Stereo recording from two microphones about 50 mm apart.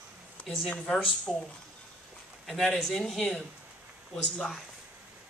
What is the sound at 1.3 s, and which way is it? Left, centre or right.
Speech, centre.